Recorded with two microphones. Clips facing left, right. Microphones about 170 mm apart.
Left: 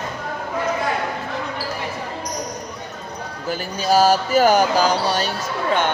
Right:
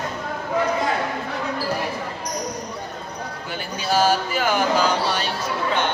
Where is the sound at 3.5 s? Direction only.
40° left (ahead or behind).